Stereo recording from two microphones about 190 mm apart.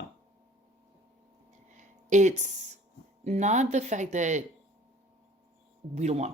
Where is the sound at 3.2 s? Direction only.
35° right (ahead or behind).